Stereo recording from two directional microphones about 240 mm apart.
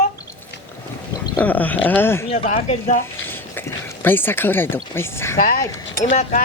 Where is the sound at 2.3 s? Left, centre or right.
Left.